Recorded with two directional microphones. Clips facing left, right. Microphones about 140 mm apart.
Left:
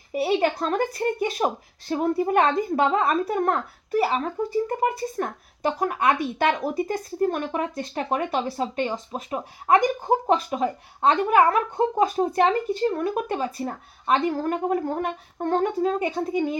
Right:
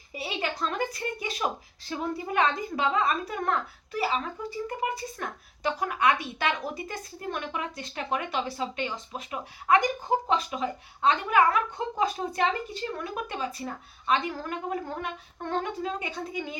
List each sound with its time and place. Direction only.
0.1 s a woman's voice: 55° left (ahead or behind)